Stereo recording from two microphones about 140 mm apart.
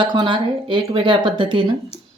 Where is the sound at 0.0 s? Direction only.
30° right (ahead or behind).